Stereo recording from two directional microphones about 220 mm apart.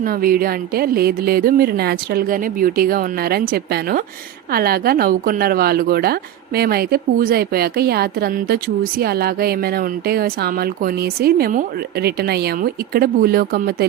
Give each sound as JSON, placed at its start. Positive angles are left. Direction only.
{"t": 0.0, "sound": "a woman's voice", "side_deg": -40}